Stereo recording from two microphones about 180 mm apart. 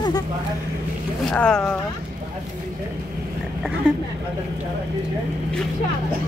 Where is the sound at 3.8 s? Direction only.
5° right (ahead or behind).